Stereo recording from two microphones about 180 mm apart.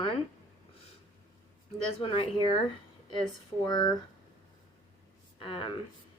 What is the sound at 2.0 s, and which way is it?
Speech, 30° left (ahead or behind).